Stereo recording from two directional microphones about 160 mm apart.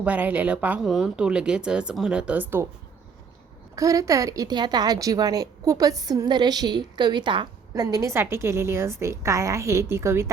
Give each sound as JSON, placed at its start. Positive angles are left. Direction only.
{"t": 0.0, "sound": "speech", "side_deg": -10}
{"t": 3.8, "sound": "a woman's voice", "side_deg": -20}